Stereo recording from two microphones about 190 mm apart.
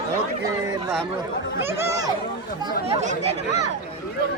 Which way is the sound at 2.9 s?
40° right (ahead or behind).